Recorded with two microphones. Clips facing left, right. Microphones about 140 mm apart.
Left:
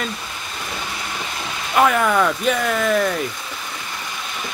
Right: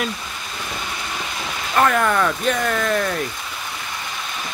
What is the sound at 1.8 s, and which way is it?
Speech, 5° left (ahead or behind).